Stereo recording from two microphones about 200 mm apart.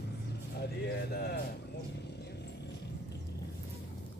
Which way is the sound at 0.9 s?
55° left (ahead or behind).